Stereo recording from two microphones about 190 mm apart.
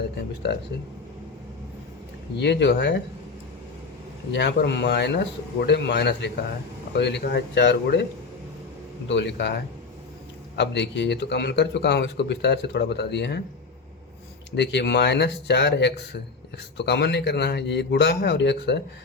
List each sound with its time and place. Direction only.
2.4 s speech: 65° left (ahead or behind)
4.3 s speech: 65° left (ahead or behind)
9.0 s speech: 65° left (ahead or behind)
10.6 s speech: 65° left (ahead or behind)
14.5 s speech: 65° left (ahead or behind)